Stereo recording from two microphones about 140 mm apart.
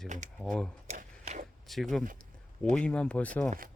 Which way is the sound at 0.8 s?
60° right (ahead or behind).